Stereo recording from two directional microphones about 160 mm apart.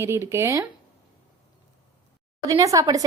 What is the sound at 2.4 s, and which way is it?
Speech, 20° right (ahead or behind).